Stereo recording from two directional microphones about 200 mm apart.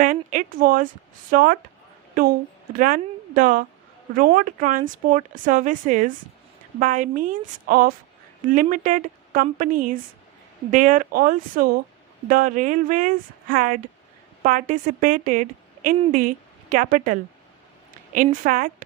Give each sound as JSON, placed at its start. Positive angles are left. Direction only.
{"t": 0.0, "sound": "a woman's voice", "side_deg": -40}
{"t": 2.7, "sound": "a woman's voice", "side_deg": -45}